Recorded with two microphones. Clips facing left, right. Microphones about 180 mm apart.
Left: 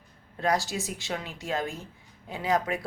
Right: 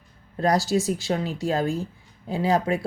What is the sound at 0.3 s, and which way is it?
A woman's voice, 35° right (ahead or behind).